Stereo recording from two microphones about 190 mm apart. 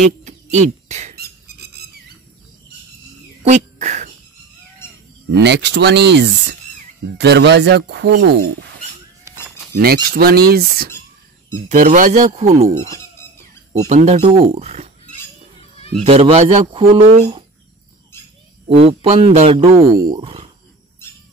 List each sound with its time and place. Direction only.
0.2 s a sound: 35° right (ahead or behind)
3.4 s a sound: 40° right (ahead or behind)
5.3 s speech: 65° right (ahead or behind)
10.0 s speech: 55° right (ahead or behind); by 12.6 s 35° right (ahead or behind)
13.8 s speech: 40° right (ahead or behind)
16.0 s speech: 35° right (ahead or behind)
18.7 s speech: 30° right (ahead or behind)